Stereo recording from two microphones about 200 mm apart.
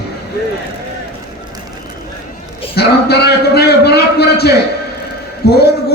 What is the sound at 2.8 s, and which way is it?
A man's voice, 55° left (ahead or behind).